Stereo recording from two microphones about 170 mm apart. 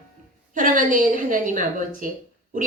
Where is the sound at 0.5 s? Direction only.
50° right (ahead or behind).